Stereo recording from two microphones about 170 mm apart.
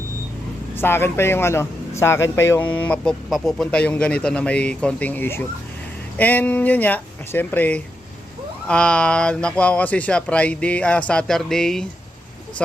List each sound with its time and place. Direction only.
0.8 s a man's voice: 15° left (ahead or behind)